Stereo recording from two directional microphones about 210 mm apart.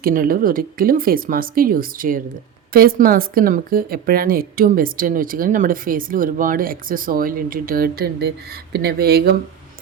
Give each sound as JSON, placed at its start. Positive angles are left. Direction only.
{"t": 0.0, "sound": "speech", "side_deg": -40}